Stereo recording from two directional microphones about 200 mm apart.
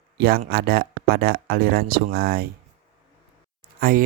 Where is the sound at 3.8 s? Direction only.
45° right (ahead or behind).